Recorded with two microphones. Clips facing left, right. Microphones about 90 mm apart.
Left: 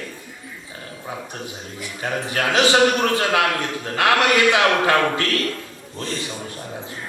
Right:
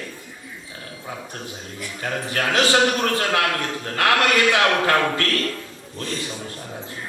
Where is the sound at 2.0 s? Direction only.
20° left (ahead or behind).